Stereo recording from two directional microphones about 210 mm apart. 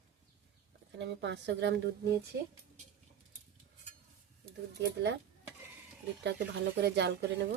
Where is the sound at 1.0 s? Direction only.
55° right (ahead or behind).